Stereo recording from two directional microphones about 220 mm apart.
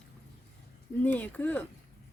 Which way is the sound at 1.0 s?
10° left (ahead or behind).